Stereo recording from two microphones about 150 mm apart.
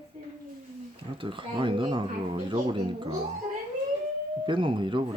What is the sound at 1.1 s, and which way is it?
Speech, 35° right (ahead or behind).